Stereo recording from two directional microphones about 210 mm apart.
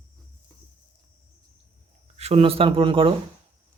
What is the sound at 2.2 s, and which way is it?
Speech, 30° right (ahead or behind).